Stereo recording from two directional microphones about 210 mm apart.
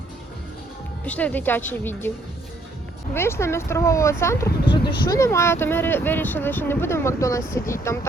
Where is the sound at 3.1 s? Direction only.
10° left (ahead or behind).